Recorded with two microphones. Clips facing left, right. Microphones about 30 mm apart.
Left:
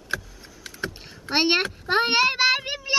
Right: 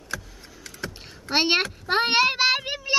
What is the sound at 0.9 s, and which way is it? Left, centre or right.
Vehicle, centre.